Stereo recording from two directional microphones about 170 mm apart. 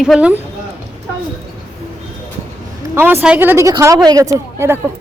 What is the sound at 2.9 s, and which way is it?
Speech, 10° right (ahead or behind).